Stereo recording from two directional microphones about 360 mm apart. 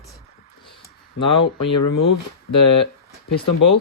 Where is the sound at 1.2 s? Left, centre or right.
Left.